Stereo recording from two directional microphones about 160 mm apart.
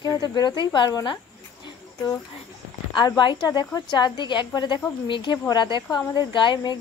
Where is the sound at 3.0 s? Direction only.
30° left (ahead or behind).